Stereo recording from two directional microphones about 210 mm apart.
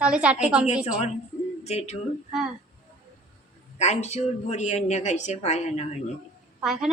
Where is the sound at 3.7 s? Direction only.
30° left (ahead or behind).